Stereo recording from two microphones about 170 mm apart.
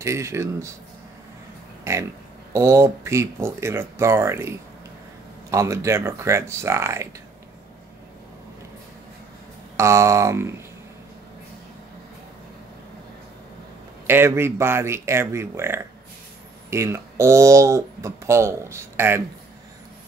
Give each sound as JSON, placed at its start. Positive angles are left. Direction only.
{"t": 0.0, "sound": "speech", "side_deg": -15}
{"t": 1.9, "sound": "speech", "side_deg": -15}
{"t": 9.8, "sound": "speech", "side_deg": -15}
{"t": 14.0, "sound": "speech", "side_deg": -15}